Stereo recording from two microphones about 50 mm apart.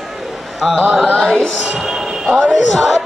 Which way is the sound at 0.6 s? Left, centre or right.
Centre.